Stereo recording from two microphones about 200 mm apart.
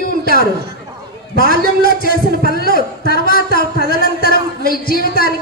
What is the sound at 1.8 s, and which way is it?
Speech, 45° left (ahead or behind).